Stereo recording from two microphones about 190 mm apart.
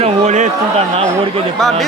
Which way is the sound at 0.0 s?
35° right (ahead or behind).